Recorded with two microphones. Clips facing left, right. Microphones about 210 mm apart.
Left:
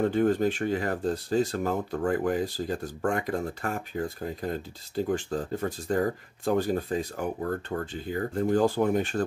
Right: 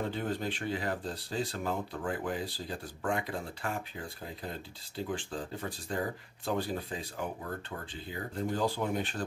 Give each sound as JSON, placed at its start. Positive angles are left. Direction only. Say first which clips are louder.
{"t": 0.0, "sound": "speech", "louder": "left 10 dB", "side_deg": 50}